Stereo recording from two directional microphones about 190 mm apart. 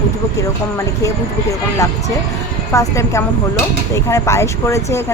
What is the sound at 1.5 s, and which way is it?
Speech, 15° left (ahead or behind).